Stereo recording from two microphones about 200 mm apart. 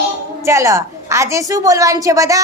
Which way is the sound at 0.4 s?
15° right (ahead or behind).